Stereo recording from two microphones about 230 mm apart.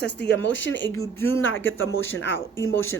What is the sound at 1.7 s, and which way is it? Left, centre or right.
Speech, left.